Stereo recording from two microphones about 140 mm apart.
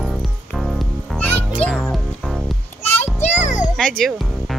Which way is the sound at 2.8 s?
50° left (ahead or behind).